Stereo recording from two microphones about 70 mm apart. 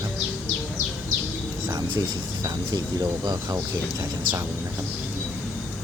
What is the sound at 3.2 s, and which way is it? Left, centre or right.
Speech, right.